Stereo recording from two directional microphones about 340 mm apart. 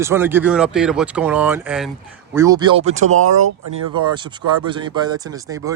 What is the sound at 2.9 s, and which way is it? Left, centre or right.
Speech, right.